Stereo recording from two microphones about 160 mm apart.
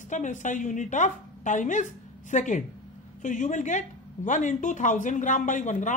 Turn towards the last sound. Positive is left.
turn(degrees=50)  # may be behind; listen again after turning